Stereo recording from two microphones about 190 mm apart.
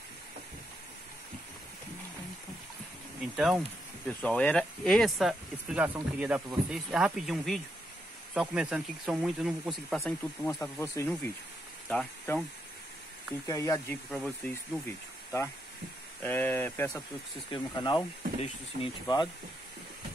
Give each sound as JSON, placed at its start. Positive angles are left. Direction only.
{"t": 3.3, "sound": "speech", "side_deg": -5}
{"t": 10.4, "sound": "speech", "side_deg": 10}
{"t": 13.5, "sound": "speech", "side_deg": 15}
{"t": 17.5, "sound": "speech", "side_deg": 25}